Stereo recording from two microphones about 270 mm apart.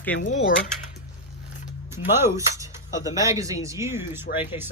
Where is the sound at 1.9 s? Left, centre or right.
Centre.